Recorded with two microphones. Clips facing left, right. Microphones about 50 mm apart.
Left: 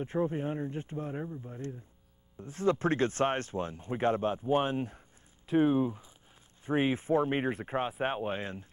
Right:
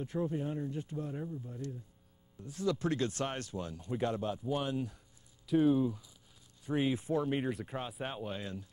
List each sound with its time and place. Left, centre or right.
0.0 s speech: left